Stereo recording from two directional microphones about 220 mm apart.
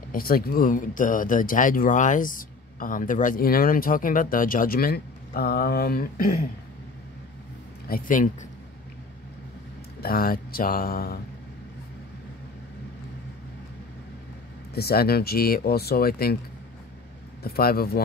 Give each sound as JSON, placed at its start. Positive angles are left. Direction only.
{"t": 0.1, "sound": "speech", "side_deg": 40}
{"t": 7.9, "sound": "speech", "side_deg": 35}
{"t": 9.9, "sound": "speech", "side_deg": 40}
{"t": 14.7, "sound": "speech", "side_deg": 45}
{"t": 17.4, "sound": "speech", "side_deg": 45}